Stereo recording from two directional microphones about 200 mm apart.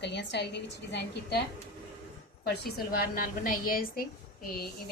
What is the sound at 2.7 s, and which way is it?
Speech, 50° left (ahead or behind).